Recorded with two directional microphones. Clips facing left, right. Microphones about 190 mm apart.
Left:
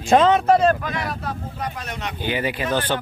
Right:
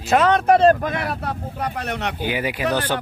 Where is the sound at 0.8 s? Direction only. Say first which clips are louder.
Right 3 dB; 60° right (ahead or behind).